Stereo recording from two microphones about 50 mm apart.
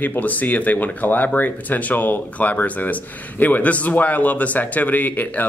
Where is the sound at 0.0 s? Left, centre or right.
Left.